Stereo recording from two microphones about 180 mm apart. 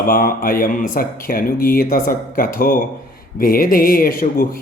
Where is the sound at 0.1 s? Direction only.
55° left (ahead or behind).